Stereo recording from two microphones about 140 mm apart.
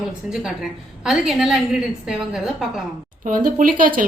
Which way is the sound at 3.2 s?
75° right (ahead or behind).